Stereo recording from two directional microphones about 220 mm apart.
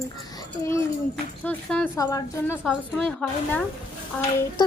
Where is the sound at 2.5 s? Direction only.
Centre (ahead or behind).